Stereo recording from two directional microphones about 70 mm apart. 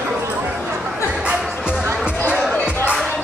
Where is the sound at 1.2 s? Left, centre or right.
Centre.